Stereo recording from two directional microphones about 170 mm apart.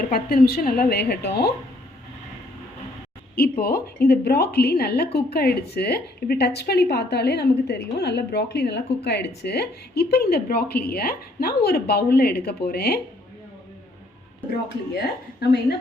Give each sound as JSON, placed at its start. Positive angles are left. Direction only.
{"t": 0.1, "sound": "a woman's voice", "side_deg": 60}
{"t": 3.3, "sound": "a woman's voice", "side_deg": 65}
{"t": 14.9, "sound": "a woman's voice", "side_deg": 70}